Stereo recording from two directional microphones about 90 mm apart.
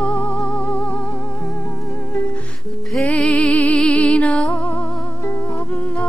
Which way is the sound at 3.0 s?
15° left (ahead or behind).